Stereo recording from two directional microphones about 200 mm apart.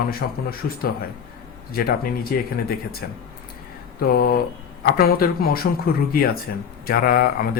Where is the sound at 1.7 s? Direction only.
50° left (ahead or behind).